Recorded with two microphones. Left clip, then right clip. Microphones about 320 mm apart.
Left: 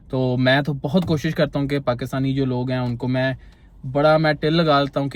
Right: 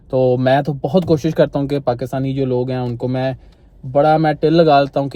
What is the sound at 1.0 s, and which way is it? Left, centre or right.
A man's voice, right.